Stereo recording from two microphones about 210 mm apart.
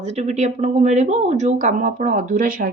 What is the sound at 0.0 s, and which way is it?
Speech, 30° right (ahead or behind).